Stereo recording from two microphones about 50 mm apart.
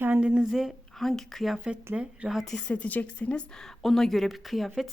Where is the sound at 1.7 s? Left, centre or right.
Centre.